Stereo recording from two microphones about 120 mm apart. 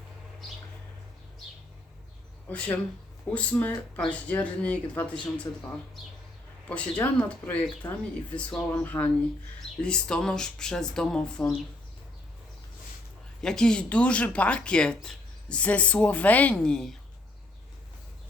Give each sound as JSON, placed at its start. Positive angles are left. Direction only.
{"t": 2.5, "sound": "speech", "side_deg": 10}
{"t": 6.7, "sound": "speech", "side_deg": 10}
{"t": 13.4, "sound": "speech", "side_deg": 5}